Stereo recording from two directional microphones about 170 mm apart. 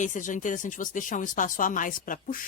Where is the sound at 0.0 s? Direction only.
50° left (ahead or behind).